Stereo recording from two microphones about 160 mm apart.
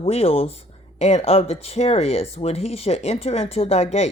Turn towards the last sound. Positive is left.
turn(degrees=40)  # may be behind; listen again after turning